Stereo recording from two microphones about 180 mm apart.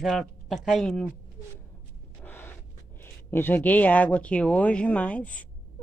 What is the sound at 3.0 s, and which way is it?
Speech, 10° left (ahead or behind).